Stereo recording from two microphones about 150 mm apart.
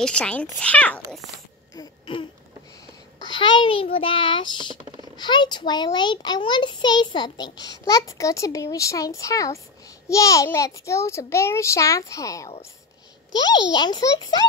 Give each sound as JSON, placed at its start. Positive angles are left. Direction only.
{"t": 0.0, "sound": "speech", "side_deg": 5}
{"t": 3.3, "sound": "a child's voice", "side_deg": 30}